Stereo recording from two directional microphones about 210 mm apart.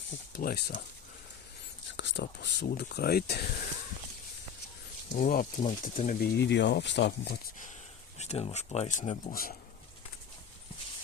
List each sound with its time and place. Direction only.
0.3 s speech: 45° left (ahead or behind)
2.0 s speech: 60° left (ahead or behind)
5.1 s speech: 40° left (ahead or behind)
6.3 s speech: 55° left (ahead or behind)
8.2 s speech: 30° left (ahead or behind)
9.3 s speech: 45° left (ahead or behind)